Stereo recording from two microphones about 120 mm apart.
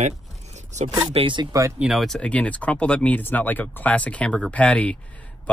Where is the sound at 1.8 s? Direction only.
Centre (ahead or behind).